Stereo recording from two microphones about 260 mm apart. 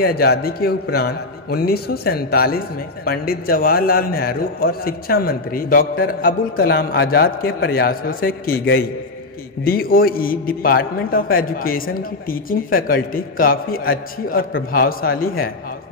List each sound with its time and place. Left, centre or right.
0.0 s a man's voice: left